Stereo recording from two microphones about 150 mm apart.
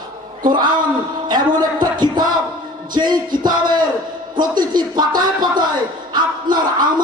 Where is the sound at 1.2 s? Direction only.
30° right (ahead or behind).